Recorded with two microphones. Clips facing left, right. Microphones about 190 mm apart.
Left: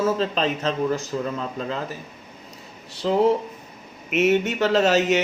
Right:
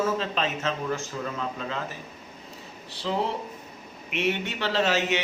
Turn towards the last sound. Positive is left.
turn(degrees=40)  # may be behind; listen again after turning